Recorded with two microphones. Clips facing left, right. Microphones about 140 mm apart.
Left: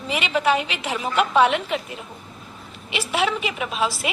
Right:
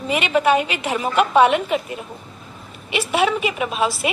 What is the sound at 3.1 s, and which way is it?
A woman's voice, 55° right (ahead or behind).